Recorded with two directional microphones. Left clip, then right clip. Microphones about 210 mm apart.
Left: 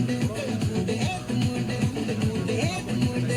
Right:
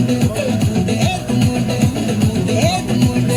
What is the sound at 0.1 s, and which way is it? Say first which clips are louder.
Music: right 11 dB; 40° right (ahead or behind).